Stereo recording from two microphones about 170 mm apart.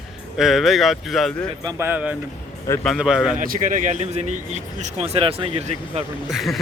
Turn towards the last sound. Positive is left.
turn(degrees=0)  # may be behind; listen again after turning